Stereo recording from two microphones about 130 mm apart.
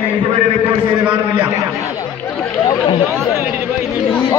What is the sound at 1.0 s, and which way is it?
Speech, 10° right (ahead or behind).